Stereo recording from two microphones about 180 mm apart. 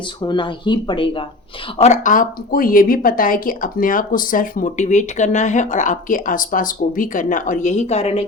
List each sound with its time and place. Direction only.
0.2 s speech: 25° left (ahead or behind)
1.8 s speech: 45° left (ahead or behind)